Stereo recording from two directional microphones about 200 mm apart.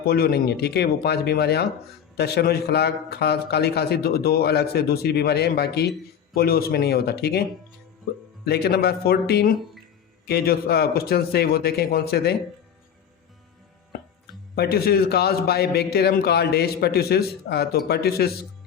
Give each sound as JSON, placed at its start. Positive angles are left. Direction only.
{"t": 0.0, "sound": "a man's voice", "side_deg": 50}
{"t": 8.4, "sound": "a man's voice", "side_deg": 55}
{"t": 14.5, "sound": "a man's voice", "side_deg": 50}